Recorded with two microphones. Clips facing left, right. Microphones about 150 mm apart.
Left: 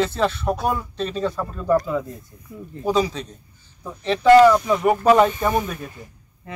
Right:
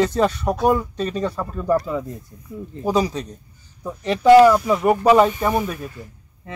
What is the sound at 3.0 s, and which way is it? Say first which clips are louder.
Speech: even; 40° right (ahead or behind).